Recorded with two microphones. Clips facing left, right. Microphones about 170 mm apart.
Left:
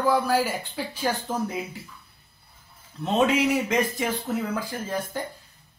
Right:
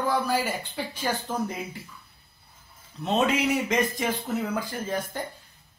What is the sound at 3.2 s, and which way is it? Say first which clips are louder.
Speech: left 3 dB; 5° left (ahead or behind).